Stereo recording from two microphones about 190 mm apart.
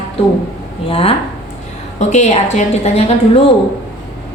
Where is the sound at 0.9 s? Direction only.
30° left (ahead or behind).